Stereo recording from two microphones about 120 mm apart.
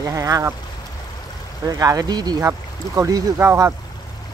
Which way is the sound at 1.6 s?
30° right (ahead or behind).